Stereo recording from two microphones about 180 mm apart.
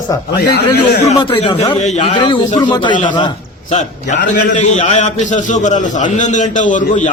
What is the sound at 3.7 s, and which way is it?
A man's voice, 40° left (ahead or behind).